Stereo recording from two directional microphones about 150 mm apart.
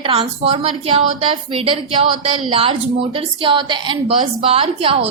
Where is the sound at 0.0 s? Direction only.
35° right (ahead or behind).